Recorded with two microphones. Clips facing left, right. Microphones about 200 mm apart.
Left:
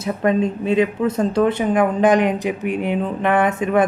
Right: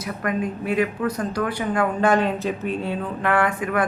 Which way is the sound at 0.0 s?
25° left (ahead or behind).